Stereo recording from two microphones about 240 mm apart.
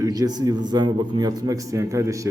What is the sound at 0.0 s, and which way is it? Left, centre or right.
A man's voice, centre.